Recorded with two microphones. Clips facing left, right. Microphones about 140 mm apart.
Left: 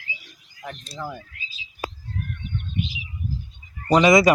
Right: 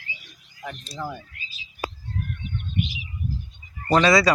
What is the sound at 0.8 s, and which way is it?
Speech, 10° left (ahead or behind).